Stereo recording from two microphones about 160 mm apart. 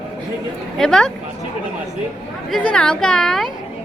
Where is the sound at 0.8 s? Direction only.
5° left (ahead or behind).